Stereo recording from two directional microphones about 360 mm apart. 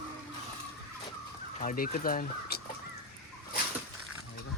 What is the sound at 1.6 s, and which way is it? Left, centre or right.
Speech, left.